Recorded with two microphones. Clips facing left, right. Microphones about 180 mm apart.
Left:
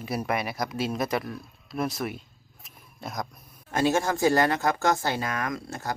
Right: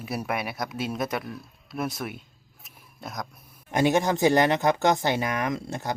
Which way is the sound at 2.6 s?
Centre (ahead or behind).